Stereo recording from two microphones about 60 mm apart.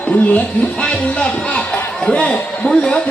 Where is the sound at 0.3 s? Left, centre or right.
Left.